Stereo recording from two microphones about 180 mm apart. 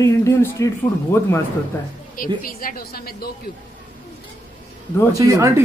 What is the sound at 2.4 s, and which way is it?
Speech, 50° left (ahead or behind).